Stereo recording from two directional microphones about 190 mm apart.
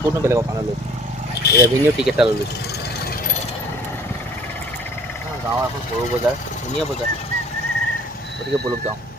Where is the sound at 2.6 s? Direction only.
60° left (ahead or behind).